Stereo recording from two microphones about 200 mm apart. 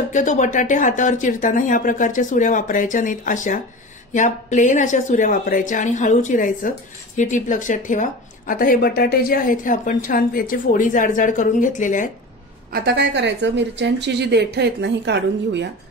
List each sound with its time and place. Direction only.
0.1 s a woman's voice: 40° left (ahead or behind)
12.7 s a woman's voice: 60° right (ahead or behind)